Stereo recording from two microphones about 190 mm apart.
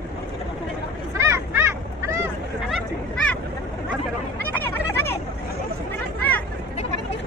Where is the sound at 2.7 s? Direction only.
Centre (ahead or behind).